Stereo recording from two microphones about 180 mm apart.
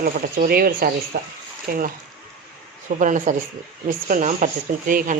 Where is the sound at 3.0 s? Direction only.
45° right (ahead or behind).